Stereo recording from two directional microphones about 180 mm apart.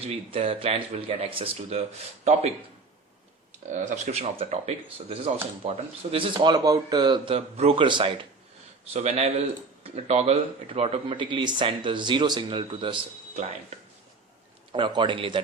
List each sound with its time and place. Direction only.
0.0 s speech: 30° right (ahead or behind)
3.7 s speech: 40° right (ahead or behind)